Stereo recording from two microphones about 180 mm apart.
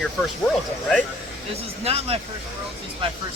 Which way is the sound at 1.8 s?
35° right (ahead or behind).